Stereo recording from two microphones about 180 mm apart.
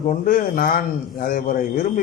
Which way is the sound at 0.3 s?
50° left (ahead or behind).